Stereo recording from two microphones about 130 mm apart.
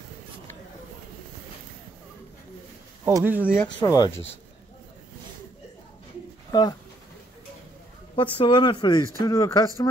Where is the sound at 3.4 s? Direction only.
15° left (ahead or behind).